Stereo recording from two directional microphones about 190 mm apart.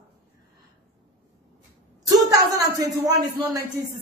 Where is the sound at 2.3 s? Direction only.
20° right (ahead or behind).